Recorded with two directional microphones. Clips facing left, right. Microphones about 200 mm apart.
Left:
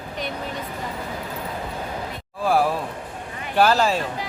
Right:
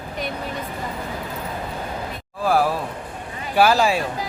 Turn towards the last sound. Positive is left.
turn(degrees=-10)  # may be behind; listen again after turning